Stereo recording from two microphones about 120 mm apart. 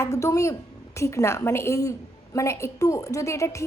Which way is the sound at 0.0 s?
25° left (ahead or behind).